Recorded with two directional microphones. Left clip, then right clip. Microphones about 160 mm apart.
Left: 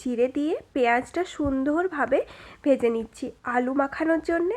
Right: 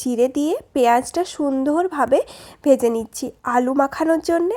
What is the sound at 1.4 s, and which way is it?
A woman's voice, 30° right (ahead or behind).